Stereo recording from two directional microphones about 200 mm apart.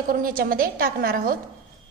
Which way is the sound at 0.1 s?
45° right (ahead or behind).